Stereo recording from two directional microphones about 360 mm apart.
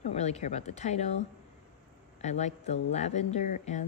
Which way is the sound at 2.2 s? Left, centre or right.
Centre.